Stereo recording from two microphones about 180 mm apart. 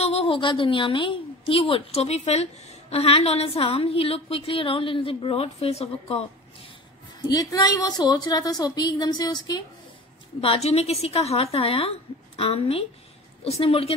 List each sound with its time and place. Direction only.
0.0 s a woman's voice: 35° left (ahead or behind)
7.2 s a woman's voice: 20° left (ahead or behind)
10.4 s a woman's voice: 35° left (ahead or behind)